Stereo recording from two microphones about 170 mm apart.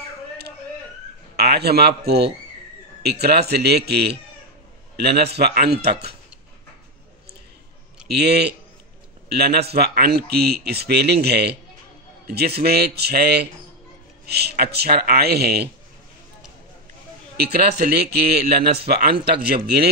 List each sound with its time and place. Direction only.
1.3 s a man's voice: 75° right (ahead or behind)
8.1 s speech: 70° right (ahead or behind)
12.5 s speech: 70° right (ahead or behind)
17.4 s speech: 70° right (ahead or behind)